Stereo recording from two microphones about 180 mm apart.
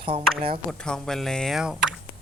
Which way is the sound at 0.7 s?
5° left (ahead or behind).